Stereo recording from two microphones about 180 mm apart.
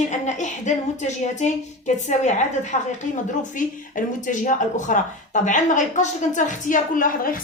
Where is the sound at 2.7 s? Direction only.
40° left (ahead or behind).